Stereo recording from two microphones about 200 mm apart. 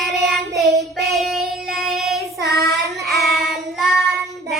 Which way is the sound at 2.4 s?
55° right (ahead or behind).